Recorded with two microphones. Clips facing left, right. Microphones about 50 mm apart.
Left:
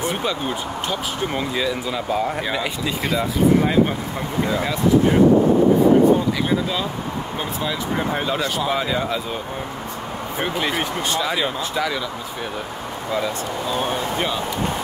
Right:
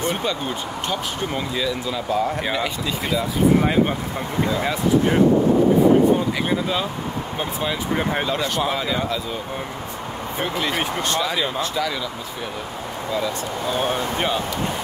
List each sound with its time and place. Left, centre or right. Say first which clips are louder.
0.0 s speech: even; centre
1.6 s speech: left 1 dB; centre
10.4 s speech: left 1 dB; centre
13.7 s speech: right 1 dB; centre